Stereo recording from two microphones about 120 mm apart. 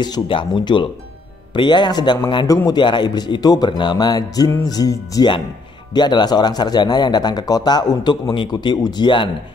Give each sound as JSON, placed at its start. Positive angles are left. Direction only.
{"t": 0.0, "sound": "a man's voice", "side_deg": 40}